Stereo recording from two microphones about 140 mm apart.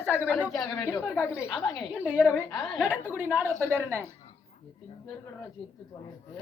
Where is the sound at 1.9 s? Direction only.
10° right (ahead or behind).